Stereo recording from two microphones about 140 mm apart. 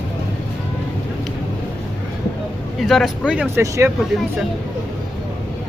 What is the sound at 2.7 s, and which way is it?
Speech, centre (ahead or behind).